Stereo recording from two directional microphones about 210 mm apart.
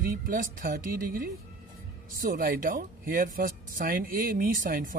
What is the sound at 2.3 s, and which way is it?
Speech, 40° right (ahead or behind).